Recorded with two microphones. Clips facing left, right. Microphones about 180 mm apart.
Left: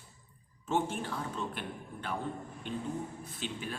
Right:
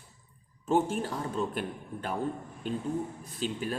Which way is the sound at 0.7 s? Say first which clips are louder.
Right 5 dB; 40° right (ahead or behind).